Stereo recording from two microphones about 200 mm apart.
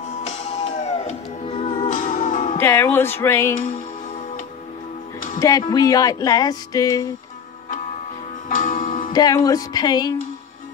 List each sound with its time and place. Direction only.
0.3 s music: 35° left (ahead or behind)
2.6 s music: 10° left (ahead or behind)
5.4 s music: 20° left (ahead or behind)
8.5 s music: 40° left (ahead or behind)
9.1 s speech: 20° left (ahead or behind)